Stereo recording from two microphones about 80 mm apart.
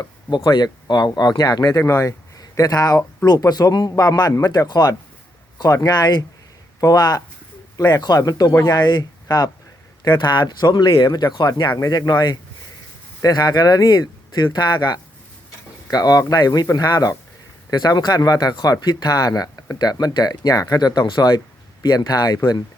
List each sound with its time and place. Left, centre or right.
0.3 s speech: left